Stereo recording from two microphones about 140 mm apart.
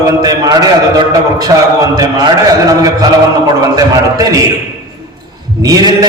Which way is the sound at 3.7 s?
25° right (ahead or behind).